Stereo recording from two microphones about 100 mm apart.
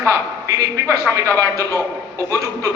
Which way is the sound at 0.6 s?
35° right (ahead or behind).